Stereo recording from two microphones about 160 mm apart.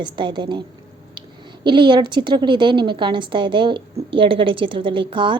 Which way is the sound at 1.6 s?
30° right (ahead or behind).